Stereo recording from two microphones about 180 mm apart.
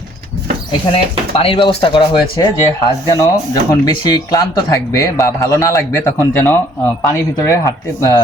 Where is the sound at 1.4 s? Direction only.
30° left (ahead or behind).